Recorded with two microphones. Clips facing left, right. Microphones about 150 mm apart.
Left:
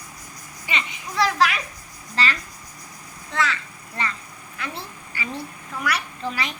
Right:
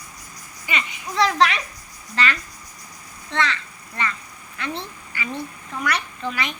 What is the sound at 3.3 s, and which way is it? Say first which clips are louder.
Speech: right 1 dB; 5° left (ahead or behind).